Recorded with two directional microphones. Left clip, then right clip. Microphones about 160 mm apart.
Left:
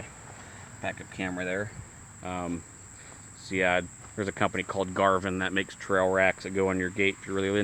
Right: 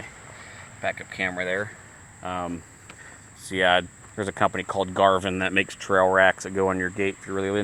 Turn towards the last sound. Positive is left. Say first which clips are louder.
# right 1 dB
turn(degrees=15)  # may be behind; listen again after turning